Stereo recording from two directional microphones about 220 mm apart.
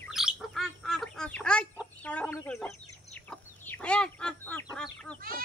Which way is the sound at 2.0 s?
5° left (ahead or behind).